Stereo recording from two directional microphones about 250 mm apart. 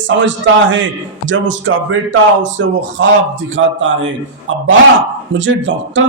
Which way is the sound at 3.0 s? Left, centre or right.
Right.